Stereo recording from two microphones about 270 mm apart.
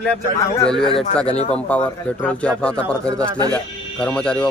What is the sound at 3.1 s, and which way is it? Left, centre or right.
Speech, centre.